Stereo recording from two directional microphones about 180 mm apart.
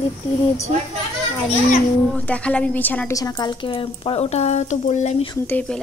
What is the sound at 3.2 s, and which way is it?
Speech, 25° left (ahead or behind).